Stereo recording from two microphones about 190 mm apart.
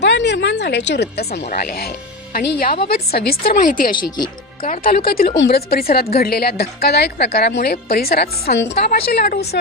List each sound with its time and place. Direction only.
0.0 s a woman's voice: 70° left (ahead or behind)